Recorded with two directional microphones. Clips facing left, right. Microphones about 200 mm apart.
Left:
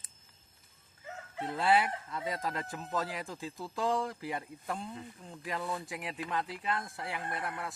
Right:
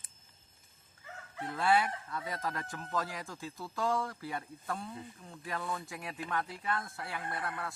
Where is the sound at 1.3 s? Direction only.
20° left (ahead or behind).